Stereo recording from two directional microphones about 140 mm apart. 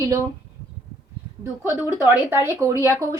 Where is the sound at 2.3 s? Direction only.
20° right (ahead or behind).